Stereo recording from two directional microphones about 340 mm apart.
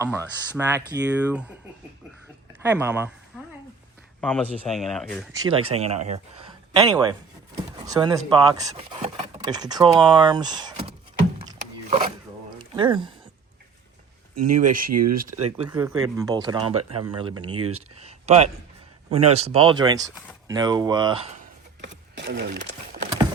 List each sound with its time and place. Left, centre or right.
0.0 s speech: centre
2.6 s speech: centre
4.2 s speech: centre
5.3 s speech: centre
11.4 s a sound: centre
14.3 s speech: right
15.5 s speech: centre
17.6 s speech: right
18.0 s a sound: centre
19.1 s speech: centre
21.8 s a sound: right